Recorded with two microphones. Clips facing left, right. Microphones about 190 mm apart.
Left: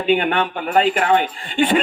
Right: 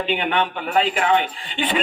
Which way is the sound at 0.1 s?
50° left (ahead or behind).